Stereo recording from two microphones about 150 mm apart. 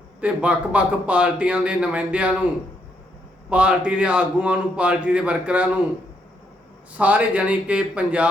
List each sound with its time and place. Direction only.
0.2 s a man's voice: 10° right (ahead or behind)
3.5 s a man's voice: 5° right (ahead or behind)
7.0 s a man's voice: 10° right (ahead or behind)